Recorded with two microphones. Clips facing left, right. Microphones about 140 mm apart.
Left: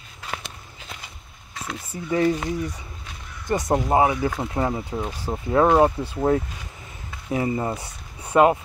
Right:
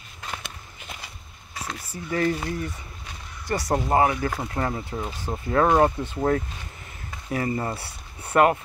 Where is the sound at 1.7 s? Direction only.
20° left (ahead or behind).